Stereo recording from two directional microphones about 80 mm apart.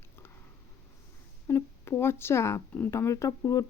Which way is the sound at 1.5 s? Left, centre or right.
Left.